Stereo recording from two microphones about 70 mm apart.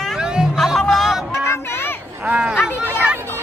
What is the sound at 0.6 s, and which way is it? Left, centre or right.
Music, centre.